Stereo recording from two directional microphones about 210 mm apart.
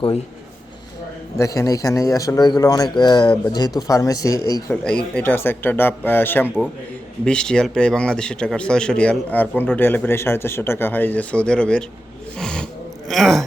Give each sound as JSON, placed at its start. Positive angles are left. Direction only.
{"t": 1.4, "sound": "a man's voice", "side_deg": 15}
{"t": 4.7, "sound": "a man's voice", "side_deg": 5}
{"t": 12.4, "sound": "a sound", "side_deg": 5}
{"t": 13.1, "sound": "speech", "side_deg": 0}